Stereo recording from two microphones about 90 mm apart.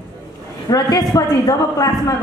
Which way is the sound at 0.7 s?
50° left (ahead or behind).